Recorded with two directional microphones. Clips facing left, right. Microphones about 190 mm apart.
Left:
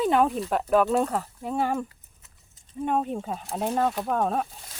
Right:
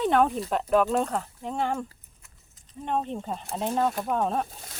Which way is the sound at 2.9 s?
10° left (ahead or behind).